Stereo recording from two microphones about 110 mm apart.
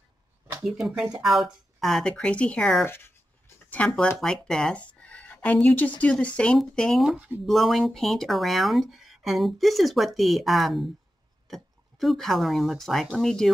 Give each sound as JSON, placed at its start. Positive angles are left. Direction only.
{"t": 0.7, "sound": "speech", "side_deg": -5}
{"t": 2.8, "sound": "speech", "side_deg": 20}
{"t": 3.7, "sound": "speech", "side_deg": 10}